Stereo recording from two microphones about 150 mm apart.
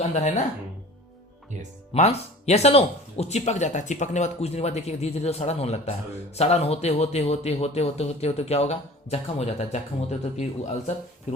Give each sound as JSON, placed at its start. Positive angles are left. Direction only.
{"t": 0.0, "sound": "speech", "side_deg": 50}
{"t": 1.9, "sound": "speech", "side_deg": 45}